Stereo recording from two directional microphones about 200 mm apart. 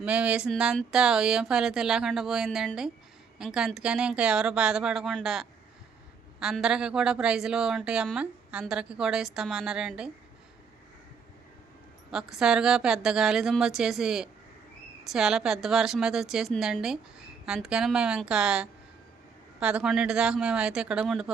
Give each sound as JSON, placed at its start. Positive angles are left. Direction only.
{"t": 0.0, "sound": "a woman's voice", "side_deg": -5}
{"t": 12.1, "sound": "a woman's voice", "side_deg": 0}